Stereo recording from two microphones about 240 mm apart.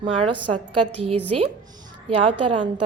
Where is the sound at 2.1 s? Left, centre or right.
Right.